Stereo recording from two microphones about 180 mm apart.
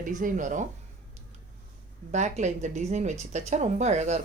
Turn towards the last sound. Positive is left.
turn(degrees=-40)  # may be behind; listen again after turning